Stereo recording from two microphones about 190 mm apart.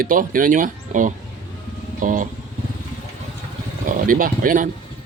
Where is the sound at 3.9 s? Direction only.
45° right (ahead or behind).